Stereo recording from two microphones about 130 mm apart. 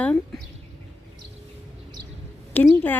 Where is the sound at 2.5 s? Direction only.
10° left (ahead or behind).